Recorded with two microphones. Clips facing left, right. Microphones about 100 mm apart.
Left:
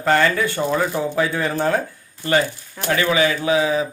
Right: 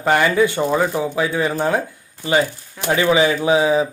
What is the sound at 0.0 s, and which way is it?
Speech, 15° right (ahead or behind).